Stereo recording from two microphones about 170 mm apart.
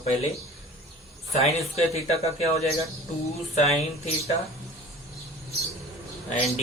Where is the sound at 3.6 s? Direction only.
40° left (ahead or behind).